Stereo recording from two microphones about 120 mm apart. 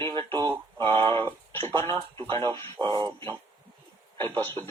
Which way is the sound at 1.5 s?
20° left (ahead or behind).